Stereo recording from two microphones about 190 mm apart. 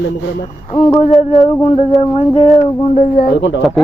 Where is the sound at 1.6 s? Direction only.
35° left (ahead or behind).